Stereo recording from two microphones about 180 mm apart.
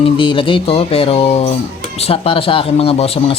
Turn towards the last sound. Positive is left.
turn(degrees=30)  # may be behind; listen again after turning